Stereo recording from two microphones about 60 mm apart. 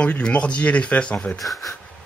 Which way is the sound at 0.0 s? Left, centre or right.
Left.